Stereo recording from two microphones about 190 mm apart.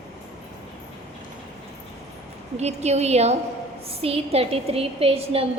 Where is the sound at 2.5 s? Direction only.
35° right (ahead or behind).